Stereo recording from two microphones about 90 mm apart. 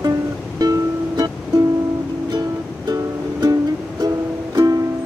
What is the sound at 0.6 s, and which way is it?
Music, 45° right (ahead or behind).